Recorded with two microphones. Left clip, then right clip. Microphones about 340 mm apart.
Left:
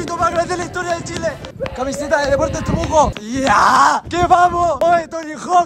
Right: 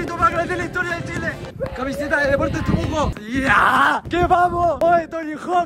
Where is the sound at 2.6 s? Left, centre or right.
Centre.